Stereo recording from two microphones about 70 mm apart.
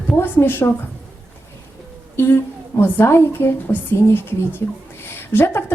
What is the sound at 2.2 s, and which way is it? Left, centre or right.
A woman's voice, left.